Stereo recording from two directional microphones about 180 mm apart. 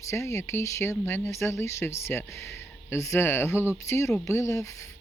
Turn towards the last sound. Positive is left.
turn(degrees=15)  # may be behind; listen again after turning